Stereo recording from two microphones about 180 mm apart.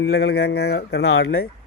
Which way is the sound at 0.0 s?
75° left (ahead or behind).